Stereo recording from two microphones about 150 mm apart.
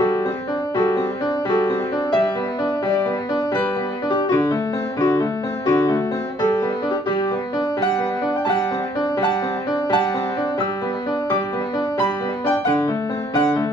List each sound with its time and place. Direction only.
0.7 s music: 25° left (ahead or behind)
4.1 s music: 30° left (ahead or behind)
12.4 s music: 20° left (ahead or behind)